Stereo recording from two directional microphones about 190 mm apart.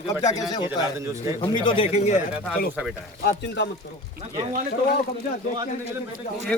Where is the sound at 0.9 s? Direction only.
15° right (ahead or behind).